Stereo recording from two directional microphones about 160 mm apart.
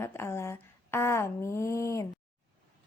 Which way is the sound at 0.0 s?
15° left (ahead or behind).